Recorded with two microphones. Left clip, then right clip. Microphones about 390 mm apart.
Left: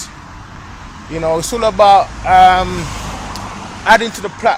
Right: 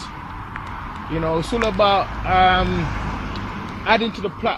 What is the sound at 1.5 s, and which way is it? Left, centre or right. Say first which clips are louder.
Speech: left 7 dB; left.